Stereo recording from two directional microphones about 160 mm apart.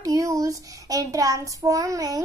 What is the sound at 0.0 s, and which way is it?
A child's voice, 20° right (ahead or behind).